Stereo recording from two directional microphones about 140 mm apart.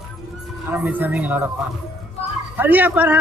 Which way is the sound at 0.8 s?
10° right (ahead or behind).